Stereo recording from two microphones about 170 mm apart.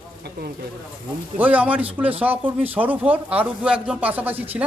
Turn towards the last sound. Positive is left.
turn(degrees=-10)  # may be behind; listen again after turning